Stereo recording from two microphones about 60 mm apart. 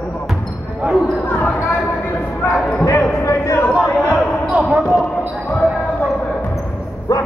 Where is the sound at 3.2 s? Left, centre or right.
Left.